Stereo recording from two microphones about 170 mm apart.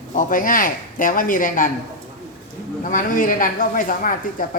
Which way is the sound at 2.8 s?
50° left (ahead or behind).